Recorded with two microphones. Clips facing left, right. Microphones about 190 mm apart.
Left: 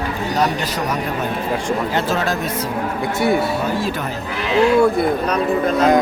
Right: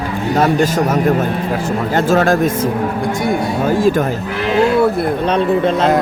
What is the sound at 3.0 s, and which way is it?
Speech, 5° left (ahead or behind).